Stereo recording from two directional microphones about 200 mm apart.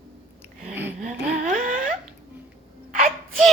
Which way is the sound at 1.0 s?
40° right (ahead or behind).